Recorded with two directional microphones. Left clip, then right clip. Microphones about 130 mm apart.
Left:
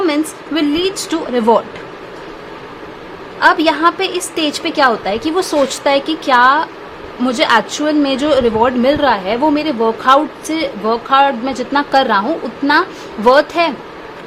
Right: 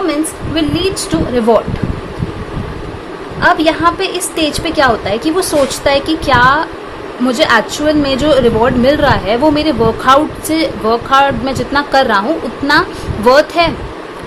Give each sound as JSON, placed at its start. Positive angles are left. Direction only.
{"t": 0.0, "sound": "a sound", "side_deg": 50}
{"t": 3.4, "sound": "a woman's voice", "side_deg": 40}
{"t": 13.2, "sound": "a woman's voice", "side_deg": 30}